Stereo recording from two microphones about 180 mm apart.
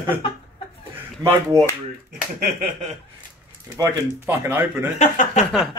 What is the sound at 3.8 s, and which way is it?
Speech, 15° right (ahead or behind).